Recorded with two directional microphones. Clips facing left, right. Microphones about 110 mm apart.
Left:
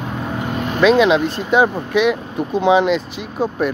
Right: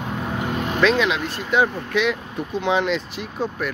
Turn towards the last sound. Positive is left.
turn(degrees=10)  # may be behind; listen again after turning